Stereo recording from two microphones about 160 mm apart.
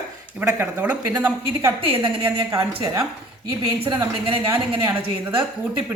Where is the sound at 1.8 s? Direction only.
30° right (ahead or behind).